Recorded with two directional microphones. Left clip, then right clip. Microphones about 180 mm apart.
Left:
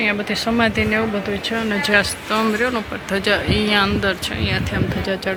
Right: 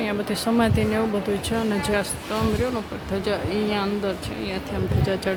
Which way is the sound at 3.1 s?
Centre (ahead or behind).